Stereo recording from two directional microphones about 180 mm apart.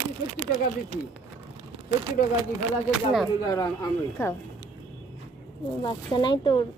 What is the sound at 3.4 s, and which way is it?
Speech, 20° left (ahead or behind).